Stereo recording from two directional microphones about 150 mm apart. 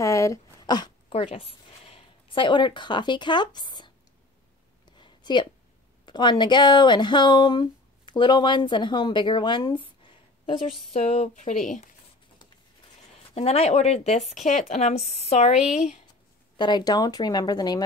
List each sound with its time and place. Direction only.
0.0 s a sound: 20° left (ahead or behind)
1.1 s speech: 40° left (ahead or behind)
4.9 s a sound: 30° left (ahead or behind)
6.0 s speech: 30° left (ahead or behind)
10.9 s speech: 45° left (ahead or behind)
13.3 s speech: 45° left (ahead or behind)
16.5 s speech: 30° left (ahead or behind)